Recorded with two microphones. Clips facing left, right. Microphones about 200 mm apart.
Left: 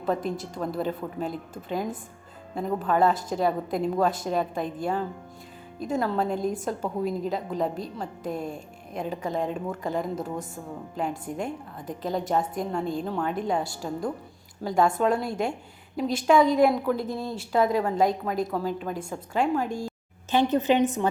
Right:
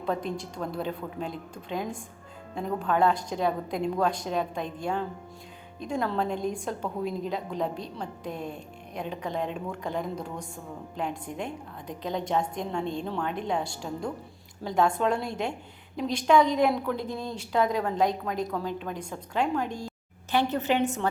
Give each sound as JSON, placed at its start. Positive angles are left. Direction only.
{"t": 0.0, "sound": "a woman's voice", "side_deg": 5}
{"t": 8.2, "sound": "speech", "side_deg": 45}
{"t": 8.9, "sound": "a woman's voice", "side_deg": 5}
{"t": 11.3, "sound": "speech", "side_deg": 45}
{"t": 11.9, "sound": "a woman's voice", "side_deg": 5}
{"t": 20.3, "sound": "a woman's voice", "side_deg": 20}